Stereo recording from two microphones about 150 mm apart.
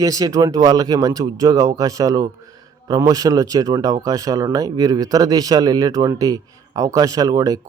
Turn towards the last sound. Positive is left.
turn(degrees=-25)  # may be behind; listen again after turning